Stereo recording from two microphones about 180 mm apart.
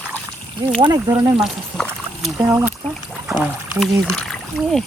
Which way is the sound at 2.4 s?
10° right (ahead or behind).